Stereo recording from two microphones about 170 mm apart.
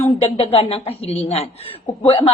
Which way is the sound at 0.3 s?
35° left (ahead or behind).